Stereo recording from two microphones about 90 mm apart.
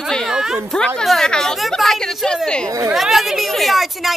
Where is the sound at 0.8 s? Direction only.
5° left (ahead or behind).